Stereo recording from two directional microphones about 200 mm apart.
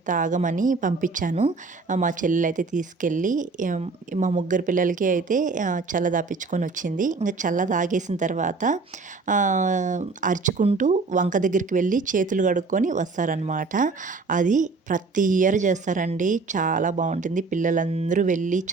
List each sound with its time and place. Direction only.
0.0 s speech: 40° right (ahead or behind)